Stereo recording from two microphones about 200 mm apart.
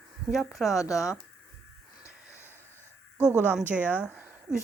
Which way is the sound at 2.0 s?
15° left (ahead or behind).